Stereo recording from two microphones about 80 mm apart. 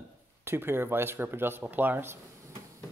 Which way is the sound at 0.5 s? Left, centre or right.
Right.